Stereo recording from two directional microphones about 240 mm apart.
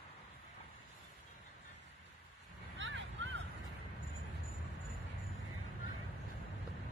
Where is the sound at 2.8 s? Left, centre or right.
Right.